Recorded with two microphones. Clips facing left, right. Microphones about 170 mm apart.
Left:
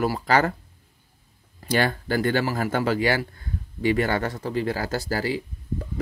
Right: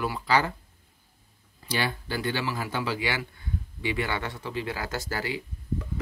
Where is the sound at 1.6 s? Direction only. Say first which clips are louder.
Left 7 dB; 50° left (ahead or behind).